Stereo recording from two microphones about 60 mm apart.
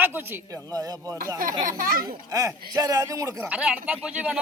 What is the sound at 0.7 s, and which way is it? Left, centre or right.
Speech, right.